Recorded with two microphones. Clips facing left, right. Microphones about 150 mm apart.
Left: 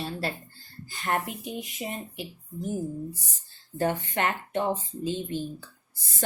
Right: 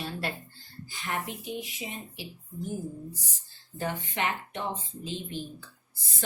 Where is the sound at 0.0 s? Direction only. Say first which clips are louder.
Left 2 dB; 35° left (ahead or behind).